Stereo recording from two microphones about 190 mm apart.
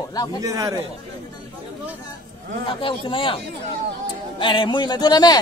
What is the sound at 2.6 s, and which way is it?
Speech, 30° left (ahead or behind).